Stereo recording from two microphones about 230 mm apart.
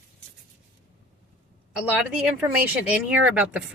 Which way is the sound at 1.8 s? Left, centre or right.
Centre.